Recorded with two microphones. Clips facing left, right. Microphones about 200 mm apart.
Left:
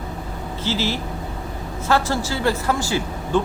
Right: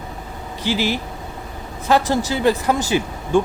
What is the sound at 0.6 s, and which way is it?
Speech, 15° right (ahead or behind).